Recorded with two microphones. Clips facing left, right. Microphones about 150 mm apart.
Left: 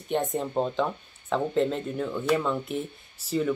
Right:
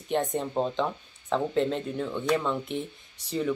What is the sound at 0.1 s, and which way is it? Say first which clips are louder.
Speech: left 1 dB; centre (ahead or behind).